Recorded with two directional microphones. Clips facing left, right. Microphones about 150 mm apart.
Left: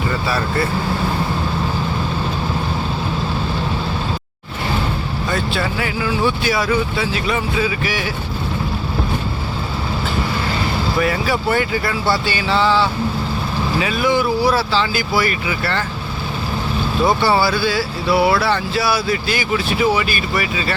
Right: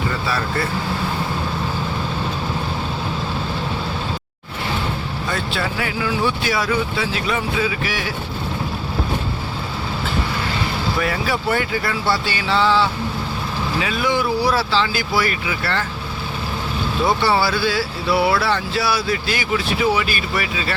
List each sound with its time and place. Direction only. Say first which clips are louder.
5.3 s speech: left 3 dB; centre (ahead or behind)
11.0 s speech: left 3 dB; centre (ahead or behind)
17.2 s speech: left 2 dB; 5° left (ahead or behind)